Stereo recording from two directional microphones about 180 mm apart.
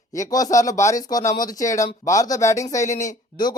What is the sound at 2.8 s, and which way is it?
Speech, 40° left (ahead or behind).